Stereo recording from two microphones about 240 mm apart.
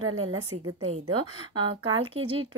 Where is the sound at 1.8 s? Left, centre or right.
Right.